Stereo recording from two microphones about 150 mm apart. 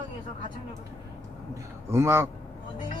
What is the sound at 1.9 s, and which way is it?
Speech, 15° right (ahead or behind).